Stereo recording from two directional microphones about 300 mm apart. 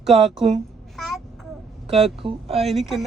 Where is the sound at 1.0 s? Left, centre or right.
Centre.